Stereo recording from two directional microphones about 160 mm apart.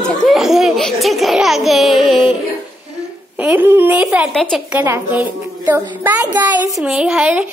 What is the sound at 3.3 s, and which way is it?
A woman's voice, 10° right (ahead or behind).